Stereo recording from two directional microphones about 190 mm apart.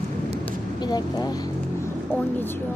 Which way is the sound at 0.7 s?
20° left (ahead or behind).